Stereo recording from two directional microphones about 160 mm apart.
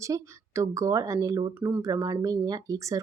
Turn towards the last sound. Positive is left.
turn(degrees=-20)  # may be behind; listen again after turning